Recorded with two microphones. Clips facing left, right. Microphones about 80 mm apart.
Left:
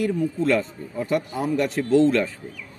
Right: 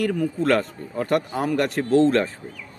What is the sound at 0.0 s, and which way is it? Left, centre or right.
Speech, right.